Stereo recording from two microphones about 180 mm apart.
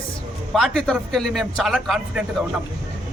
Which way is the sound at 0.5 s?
Centre (ahead or behind).